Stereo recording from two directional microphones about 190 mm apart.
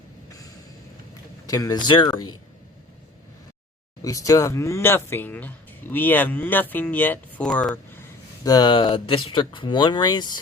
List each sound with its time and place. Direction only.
1.5 s speech: 20° left (ahead or behind)
4.0 s speech: 15° left (ahead or behind)
8.4 s speech: 20° left (ahead or behind)